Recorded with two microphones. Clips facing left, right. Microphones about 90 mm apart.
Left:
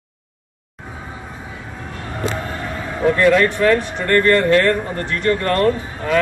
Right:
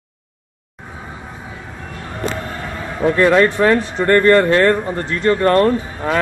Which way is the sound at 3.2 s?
30° right (ahead or behind).